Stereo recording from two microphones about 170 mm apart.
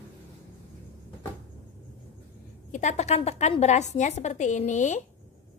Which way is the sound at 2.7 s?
40° left (ahead or behind).